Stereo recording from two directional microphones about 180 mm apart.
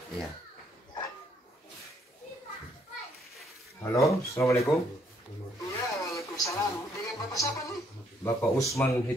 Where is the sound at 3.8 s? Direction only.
15° left (ahead or behind).